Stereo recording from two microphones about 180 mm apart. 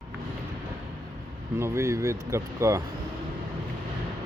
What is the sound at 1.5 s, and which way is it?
Speech, 15° right (ahead or behind).